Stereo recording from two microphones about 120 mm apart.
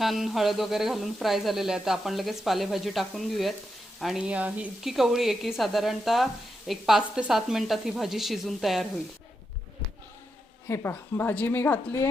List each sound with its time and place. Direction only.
0.0 s speech: centre (ahead or behind)
10.7 s a woman's voice: 20° left (ahead or behind)